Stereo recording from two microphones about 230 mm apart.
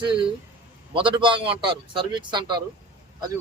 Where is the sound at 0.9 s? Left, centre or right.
Right.